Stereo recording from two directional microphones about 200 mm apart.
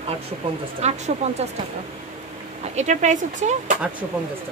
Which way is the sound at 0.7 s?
35° right (ahead or behind).